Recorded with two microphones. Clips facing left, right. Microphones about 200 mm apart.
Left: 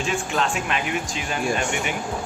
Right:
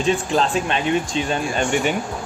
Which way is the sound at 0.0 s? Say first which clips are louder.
Right 5 dB; 35° right (ahead or behind).